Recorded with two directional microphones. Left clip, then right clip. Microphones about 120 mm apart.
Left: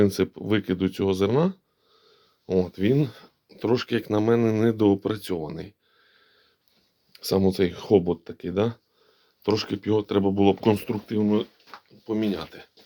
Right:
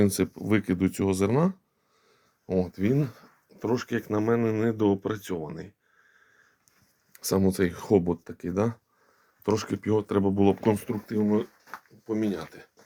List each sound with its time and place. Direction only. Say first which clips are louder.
0.0 s speech: left 3 dB; 5° right (ahead or behind)
2.5 s speech: left 4 dB; 20° left (ahead or behind); by 5.7 s 50° left (ahead or behind)
7.1 s speech: left 3 dB; centre (ahead or behind); by 11.4 s 20° left (ahead or behind)
12.0 s speech: left 2 dB; 5° left (ahead or behind)